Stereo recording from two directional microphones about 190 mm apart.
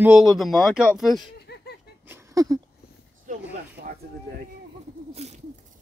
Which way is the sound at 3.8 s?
50° right (ahead or behind).